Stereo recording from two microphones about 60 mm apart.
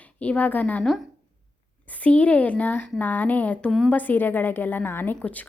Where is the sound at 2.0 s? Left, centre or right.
Left.